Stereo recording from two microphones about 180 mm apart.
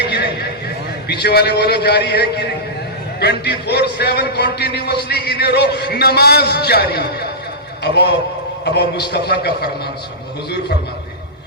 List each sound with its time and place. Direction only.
0.0 s a sound: 65° left (ahead or behind)
1.0 s a man's voice: 65° left (ahead or behind)
8.6 s a man's voice: 70° left (ahead or behind)